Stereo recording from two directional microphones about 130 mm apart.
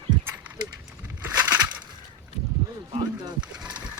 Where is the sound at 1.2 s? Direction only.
15° right (ahead or behind).